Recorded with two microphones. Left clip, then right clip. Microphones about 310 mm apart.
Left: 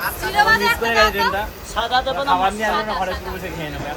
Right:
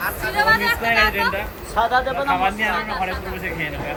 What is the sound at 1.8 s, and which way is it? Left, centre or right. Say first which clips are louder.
Speech: right 1 dB; centre.